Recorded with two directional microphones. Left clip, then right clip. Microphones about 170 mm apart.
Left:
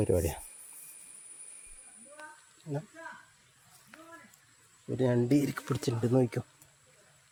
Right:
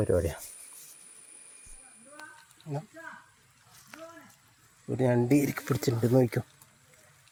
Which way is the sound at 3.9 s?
90° right.